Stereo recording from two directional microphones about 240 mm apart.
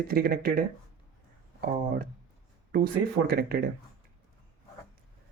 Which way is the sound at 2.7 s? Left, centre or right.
Right.